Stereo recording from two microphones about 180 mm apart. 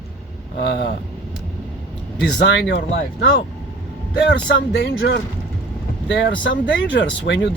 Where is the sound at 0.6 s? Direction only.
70° left (ahead or behind).